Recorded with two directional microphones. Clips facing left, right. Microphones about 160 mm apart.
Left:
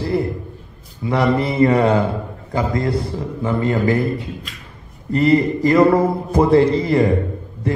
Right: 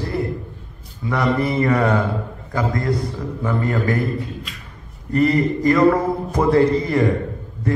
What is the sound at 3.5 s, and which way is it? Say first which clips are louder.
Speech: left 3 dB; 25° left (ahead or behind).